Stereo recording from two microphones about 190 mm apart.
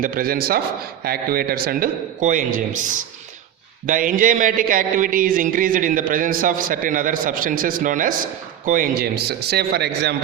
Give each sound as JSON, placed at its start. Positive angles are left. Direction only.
{"t": 0.0, "sound": "a man's voice", "side_deg": -50}